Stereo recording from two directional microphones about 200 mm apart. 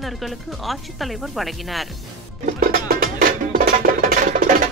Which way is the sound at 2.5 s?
50° right (ahead or behind).